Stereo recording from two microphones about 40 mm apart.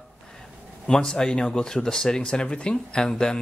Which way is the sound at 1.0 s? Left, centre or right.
Centre.